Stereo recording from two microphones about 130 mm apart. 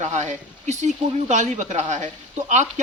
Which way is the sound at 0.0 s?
65° right (ahead or behind).